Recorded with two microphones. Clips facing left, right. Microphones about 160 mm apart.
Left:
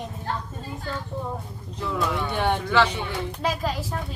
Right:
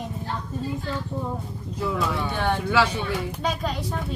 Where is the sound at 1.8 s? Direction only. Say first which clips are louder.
Right 1 dB; 5° right (ahead or behind).